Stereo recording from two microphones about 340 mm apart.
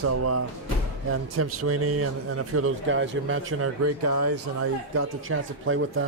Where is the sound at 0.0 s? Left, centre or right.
Right.